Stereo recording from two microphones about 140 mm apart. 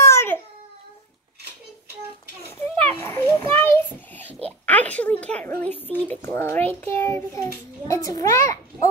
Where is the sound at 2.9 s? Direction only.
15° left (ahead or behind).